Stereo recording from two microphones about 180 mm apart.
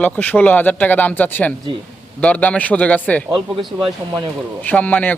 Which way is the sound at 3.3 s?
25° right (ahead or behind).